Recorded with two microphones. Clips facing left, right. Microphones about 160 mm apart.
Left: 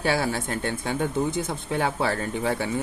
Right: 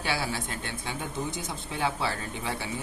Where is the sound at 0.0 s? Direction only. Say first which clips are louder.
Left 6 dB; 45° left (ahead or behind).